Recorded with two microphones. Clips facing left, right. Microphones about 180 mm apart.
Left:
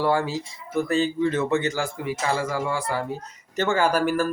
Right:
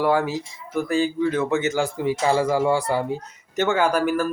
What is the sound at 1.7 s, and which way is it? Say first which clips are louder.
Speech: right 5 dB; 20° right (ahead or behind).